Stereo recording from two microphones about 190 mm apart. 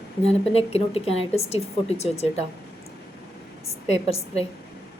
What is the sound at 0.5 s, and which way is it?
Speech, 30° left (ahead or behind).